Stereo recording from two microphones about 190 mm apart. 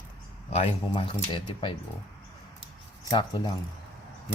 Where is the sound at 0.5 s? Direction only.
30° left (ahead or behind).